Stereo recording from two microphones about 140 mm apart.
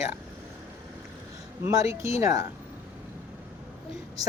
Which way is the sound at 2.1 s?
20° right (ahead or behind).